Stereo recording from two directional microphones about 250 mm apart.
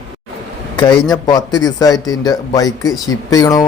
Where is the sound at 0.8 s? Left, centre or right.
Centre.